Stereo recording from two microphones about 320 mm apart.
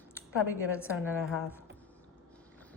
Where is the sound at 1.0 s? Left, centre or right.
Centre.